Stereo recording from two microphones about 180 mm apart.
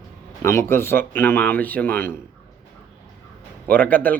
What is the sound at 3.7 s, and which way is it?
Speech, 10° left (ahead or behind).